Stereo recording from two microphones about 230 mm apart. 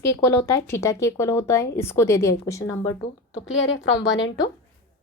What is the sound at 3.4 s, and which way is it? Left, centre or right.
Speech, left.